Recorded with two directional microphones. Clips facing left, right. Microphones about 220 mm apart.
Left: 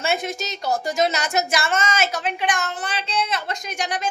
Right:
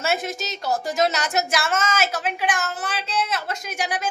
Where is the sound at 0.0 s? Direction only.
5° right (ahead or behind).